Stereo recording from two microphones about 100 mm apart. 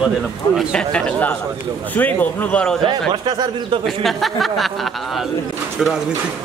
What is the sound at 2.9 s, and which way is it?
Speech, 50° right (ahead or behind).